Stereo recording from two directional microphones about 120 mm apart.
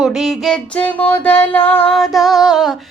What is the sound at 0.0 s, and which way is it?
Music, centre (ahead or behind).